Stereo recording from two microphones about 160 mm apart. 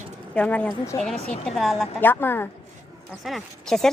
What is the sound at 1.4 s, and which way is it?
Speech, centre (ahead or behind).